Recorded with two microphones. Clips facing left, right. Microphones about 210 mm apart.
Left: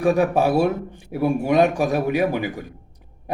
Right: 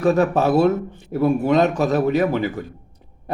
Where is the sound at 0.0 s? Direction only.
15° left (ahead or behind).